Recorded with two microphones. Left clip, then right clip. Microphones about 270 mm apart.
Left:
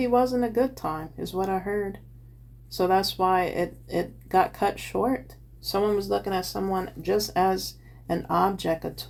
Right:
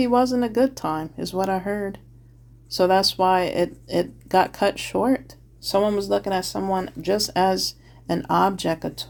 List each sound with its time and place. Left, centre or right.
0.0 s speech: right